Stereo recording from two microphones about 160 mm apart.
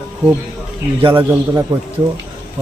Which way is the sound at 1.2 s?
15° right (ahead or behind).